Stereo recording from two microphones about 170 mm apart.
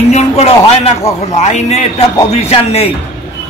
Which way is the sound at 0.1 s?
40° left (ahead or behind).